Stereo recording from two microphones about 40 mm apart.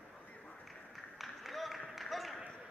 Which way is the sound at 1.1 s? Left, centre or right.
Centre.